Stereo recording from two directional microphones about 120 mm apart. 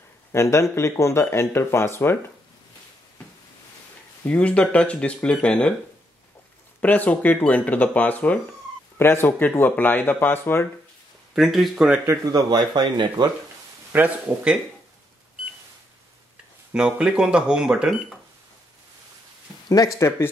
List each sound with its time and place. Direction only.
0.3 s speech: 25° left (ahead or behind)
4.2 s speech: 10° left (ahead or behind)
6.8 s speech: 15° left (ahead or behind)
11.3 s speech: centre (ahead or behind)
12.1 s speech: 30° right (ahead or behind)
13.9 s speech: 10° right (ahead or behind)
16.7 s speech: 5° right (ahead or behind)
20.0 s speech: 20° left (ahead or behind)